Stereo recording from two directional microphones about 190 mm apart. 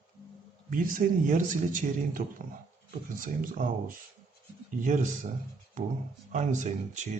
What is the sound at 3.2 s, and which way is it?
Speech, 45° right (ahead or behind).